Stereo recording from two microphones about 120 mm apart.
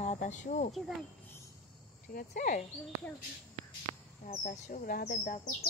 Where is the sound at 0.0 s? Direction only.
85° left.